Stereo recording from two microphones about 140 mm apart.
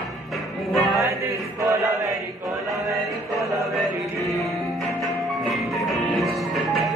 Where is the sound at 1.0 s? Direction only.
20° right (ahead or behind).